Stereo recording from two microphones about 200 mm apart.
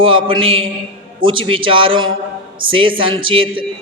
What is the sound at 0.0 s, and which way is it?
A woman's voice, 25° right (ahead or behind).